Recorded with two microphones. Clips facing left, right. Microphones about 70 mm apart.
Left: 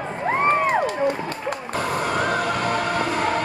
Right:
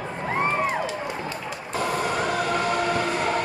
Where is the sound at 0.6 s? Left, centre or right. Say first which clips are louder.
Left 7 dB; left.